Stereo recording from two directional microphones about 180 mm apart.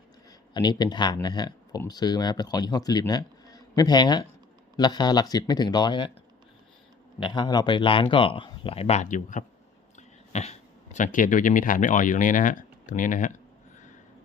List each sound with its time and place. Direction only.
0.5 s speech: 25° left (ahead or behind)
7.2 s speech: 25° left (ahead or behind); by 13.3 s 45° left (ahead or behind)